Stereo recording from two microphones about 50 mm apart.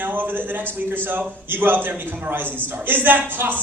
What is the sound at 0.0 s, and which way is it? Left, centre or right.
A man's voice, right.